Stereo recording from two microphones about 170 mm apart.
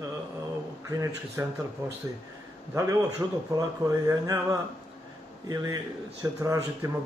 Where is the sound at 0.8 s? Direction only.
20° right (ahead or behind).